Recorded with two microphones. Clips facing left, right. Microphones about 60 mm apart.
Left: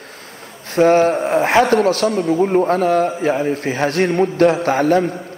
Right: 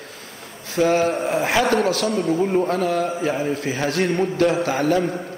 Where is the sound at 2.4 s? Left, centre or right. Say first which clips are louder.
Left 7 dB; left.